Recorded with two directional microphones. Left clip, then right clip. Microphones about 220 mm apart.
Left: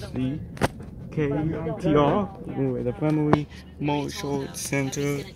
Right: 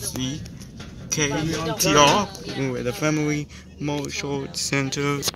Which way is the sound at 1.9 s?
10° right (ahead or behind).